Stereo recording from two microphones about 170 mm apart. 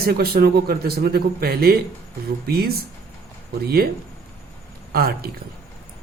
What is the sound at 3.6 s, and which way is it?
Speech, 65° right (ahead or behind).